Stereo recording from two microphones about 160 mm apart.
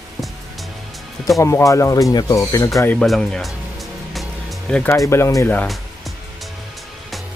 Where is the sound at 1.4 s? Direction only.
20° left (ahead or behind); by 3.5 s centre (ahead or behind).